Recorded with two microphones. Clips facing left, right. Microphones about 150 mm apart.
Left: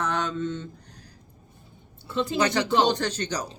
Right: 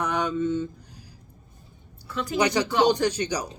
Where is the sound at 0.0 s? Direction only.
10° right (ahead or behind).